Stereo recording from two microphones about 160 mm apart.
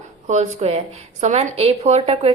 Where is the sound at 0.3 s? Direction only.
45° right (ahead or behind).